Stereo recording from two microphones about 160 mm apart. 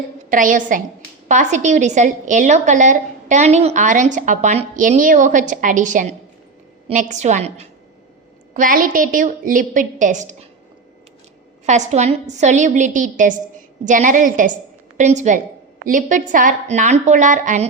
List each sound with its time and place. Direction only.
0.3 s a woman's voice: 55° right (ahead or behind)
8.5 s a woman's voice: 55° right (ahead or behind)
11.6 s a woman's voice: 45° right (ahead or behind)